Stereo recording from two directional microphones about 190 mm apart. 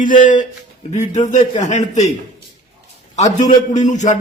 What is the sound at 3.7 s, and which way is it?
Speech, 40° left (ahead or behind).